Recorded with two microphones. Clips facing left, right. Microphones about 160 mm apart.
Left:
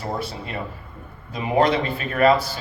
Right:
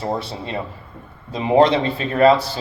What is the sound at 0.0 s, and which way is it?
Speech, 25° right (ahead or behind).